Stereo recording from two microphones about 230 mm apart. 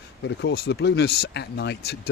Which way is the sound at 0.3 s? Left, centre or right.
Left.